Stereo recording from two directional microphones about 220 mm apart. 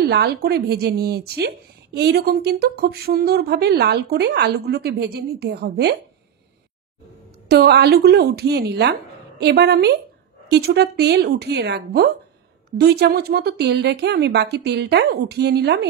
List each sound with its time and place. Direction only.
0.1 s speech: 45° right (ahead or behind)
7.4 s speech: 45° right (ahead or behind)